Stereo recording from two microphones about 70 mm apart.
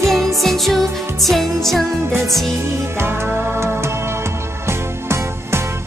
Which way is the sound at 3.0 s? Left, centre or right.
Right.